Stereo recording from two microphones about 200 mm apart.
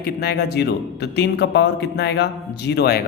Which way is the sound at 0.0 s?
50° left (ahead or behind).